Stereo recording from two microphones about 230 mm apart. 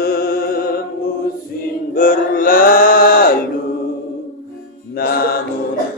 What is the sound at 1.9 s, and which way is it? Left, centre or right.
Mantra, left.